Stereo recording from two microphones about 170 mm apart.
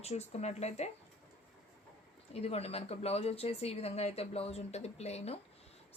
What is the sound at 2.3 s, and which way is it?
Speech, 35° left (ahead or behind).